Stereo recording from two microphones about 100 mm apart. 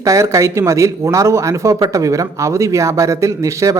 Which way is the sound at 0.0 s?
30° right (ahead or behind).